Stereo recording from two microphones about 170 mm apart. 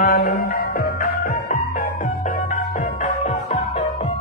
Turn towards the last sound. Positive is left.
turn(degrees=45)  # may be behind; listen again after turning